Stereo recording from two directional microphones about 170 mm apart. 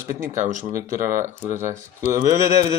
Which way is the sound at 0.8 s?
55° right (ahead or behind).